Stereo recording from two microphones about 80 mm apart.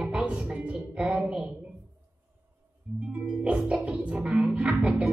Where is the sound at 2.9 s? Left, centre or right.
Centre.